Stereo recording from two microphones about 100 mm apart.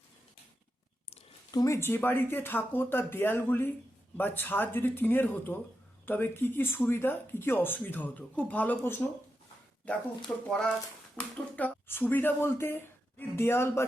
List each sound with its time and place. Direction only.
1.5 s speech: 35° left (ahead or behind)
10.4 s speech: 5° left (ahead or behind); by 13.8 s 25° left (ahead or behind)